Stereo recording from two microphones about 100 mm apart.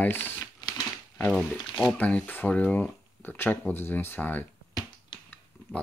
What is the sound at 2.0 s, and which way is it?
Speech, 15° left (ahead or behind).